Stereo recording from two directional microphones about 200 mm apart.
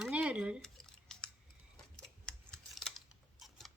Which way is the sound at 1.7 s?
5° left (ahead or behind).